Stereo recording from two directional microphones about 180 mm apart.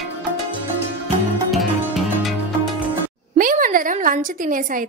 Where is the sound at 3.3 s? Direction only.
50° right (ahead or behind).